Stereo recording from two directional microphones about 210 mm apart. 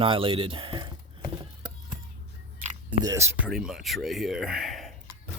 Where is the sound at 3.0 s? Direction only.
15° right (ahead or behind).